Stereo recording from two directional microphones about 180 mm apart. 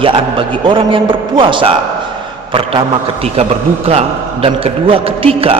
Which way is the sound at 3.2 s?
35° right (ahead or behind).